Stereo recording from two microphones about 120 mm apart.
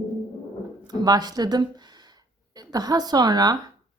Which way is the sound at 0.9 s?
35° right (ahead or behind).